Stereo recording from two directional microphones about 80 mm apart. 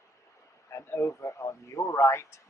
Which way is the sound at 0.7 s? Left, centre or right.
Left.